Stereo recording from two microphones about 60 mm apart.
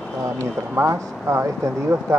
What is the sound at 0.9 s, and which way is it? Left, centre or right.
Speech, right.